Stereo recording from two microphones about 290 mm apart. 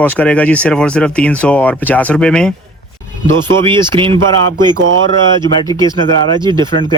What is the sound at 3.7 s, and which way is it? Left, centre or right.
Speech, centre.